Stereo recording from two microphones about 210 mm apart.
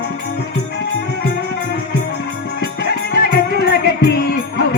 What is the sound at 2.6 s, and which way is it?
Music, 50° left (ahead or behind).